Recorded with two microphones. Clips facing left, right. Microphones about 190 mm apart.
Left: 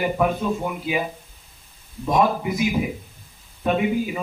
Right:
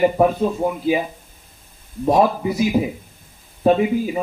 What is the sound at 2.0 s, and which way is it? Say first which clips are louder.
Speech: right 4 dB; 35° right (ahead or behind).